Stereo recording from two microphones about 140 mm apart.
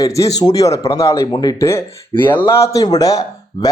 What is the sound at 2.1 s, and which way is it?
Speech, 35° left (ahead or behind).